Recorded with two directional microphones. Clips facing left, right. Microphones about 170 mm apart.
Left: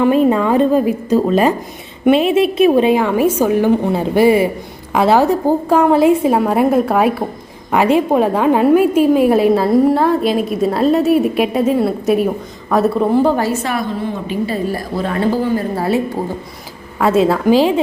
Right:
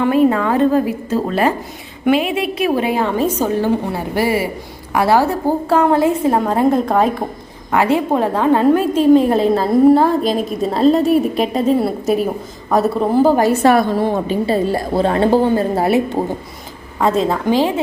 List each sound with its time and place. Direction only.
0.0 s a woman's voice: 20° left (ahead or behind); by 13.3 s centre (ahead or behind)
14.3 s a woman's voice: 30° right (ahead or behind)
17.0 s a woman's voice: 5° left (ahead or behind)